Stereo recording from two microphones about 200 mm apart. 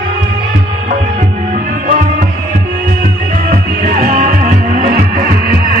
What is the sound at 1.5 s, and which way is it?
Music, 40° right (ahead or behind).